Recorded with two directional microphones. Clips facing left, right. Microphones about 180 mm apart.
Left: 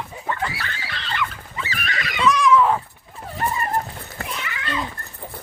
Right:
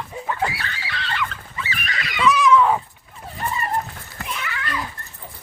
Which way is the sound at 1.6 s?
50° left (ahead or behind).